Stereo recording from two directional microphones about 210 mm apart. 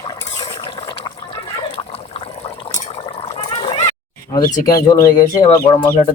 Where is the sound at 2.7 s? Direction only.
30° left (ahead or behind).